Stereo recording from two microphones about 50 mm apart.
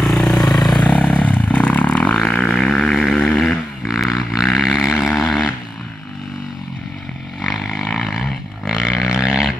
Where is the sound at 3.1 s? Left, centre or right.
Centre.